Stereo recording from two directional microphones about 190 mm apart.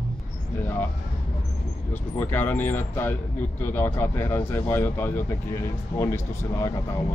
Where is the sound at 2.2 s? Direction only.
10° left (ahead or behind).